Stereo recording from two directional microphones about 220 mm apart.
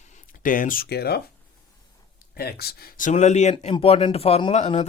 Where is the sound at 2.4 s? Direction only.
45° left (ahead or behind).